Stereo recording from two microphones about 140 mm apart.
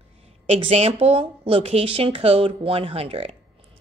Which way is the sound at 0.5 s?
45° right (ahead or behind).